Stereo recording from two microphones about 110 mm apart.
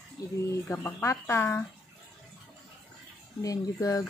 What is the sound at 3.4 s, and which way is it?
Speech, 35° left (ahead or behind).